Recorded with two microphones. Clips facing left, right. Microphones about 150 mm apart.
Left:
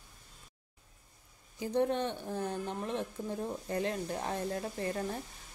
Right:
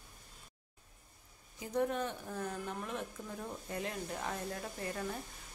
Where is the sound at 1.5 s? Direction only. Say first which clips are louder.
Left 4 dB; 30° left (ahead or behind).